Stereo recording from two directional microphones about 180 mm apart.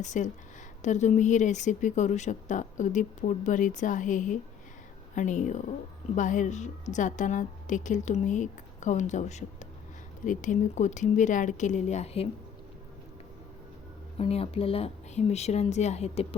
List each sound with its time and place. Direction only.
0.0 s speech: 45° left (ahead or behind)
14.2 s speech: 35° left (ahead or behind)